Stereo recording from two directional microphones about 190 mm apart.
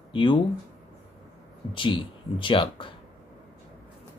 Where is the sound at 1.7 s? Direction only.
25° left (ahead or behind).